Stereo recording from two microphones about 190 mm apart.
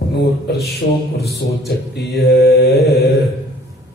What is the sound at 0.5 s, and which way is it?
A man's voice, 60° left (ahead or behind).